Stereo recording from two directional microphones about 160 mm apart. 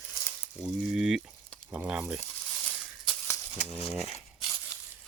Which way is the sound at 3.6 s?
40° left (ahead or behind).